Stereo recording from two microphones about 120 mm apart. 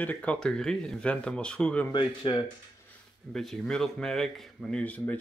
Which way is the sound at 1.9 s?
40° left (ahead or behind).